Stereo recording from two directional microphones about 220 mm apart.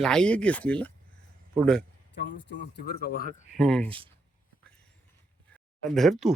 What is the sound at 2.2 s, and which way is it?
Speech, 50° left (ahead or behind).